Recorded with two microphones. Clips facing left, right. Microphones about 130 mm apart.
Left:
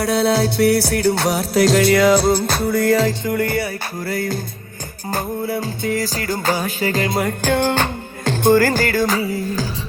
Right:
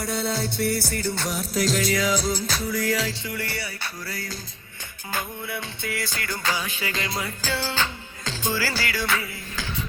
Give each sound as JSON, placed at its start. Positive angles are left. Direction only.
{"t": 0.0, "sound": "music", "side_deg": 75}
{"t": 5.1, "sound": "music", "side_deg": 40}